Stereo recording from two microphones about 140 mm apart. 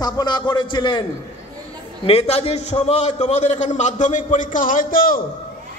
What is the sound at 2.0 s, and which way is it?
A man's voice, 45° left (ahead or behind).